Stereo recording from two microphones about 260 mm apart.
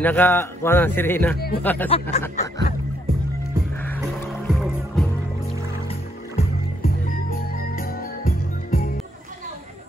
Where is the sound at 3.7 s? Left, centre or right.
Centre.